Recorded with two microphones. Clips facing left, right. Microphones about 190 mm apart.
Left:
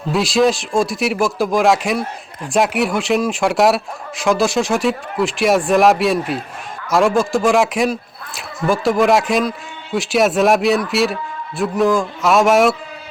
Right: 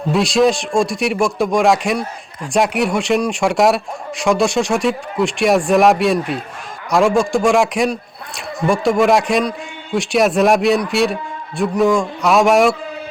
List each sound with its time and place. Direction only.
0.1 s a man's voice: centre (ahead or behind)